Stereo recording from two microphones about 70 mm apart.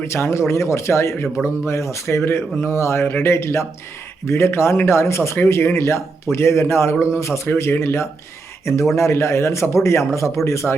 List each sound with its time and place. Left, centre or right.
0.0 s speech: left